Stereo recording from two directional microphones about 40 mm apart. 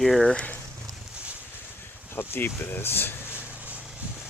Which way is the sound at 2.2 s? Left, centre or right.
Left.